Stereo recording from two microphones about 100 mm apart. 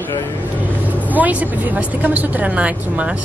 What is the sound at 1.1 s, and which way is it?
Speech, 15° right (ahead or behind).